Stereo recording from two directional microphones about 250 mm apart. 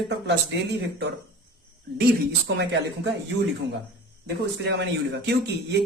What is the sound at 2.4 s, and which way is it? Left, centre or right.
Speech, right.